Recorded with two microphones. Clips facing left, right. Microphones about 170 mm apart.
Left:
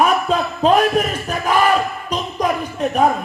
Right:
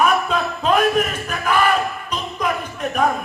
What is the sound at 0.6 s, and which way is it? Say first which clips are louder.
A man's voice: left 2 dB; 35° left (ahead or behind).